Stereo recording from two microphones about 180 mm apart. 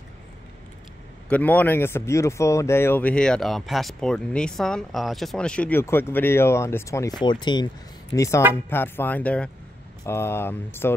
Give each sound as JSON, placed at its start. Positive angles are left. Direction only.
{"t": 1.3, "sound": "speech", "side_deg": 10}
{"t": 8.6, "sound": "speech", "side_deg": 10}